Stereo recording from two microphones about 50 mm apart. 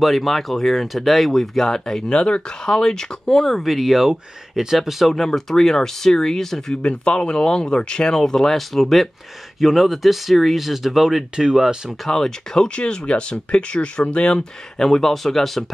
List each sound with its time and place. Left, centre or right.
0.0 s speech: centre
6.8 s speech: left; by 12.0 s centre
12.0 s speech: centre